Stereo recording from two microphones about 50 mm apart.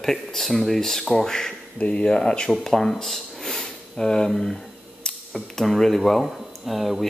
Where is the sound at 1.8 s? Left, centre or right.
Left.